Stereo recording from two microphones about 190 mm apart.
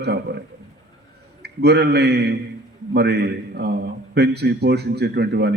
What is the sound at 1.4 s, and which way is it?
A man's voice, 60° right (ahead or behind).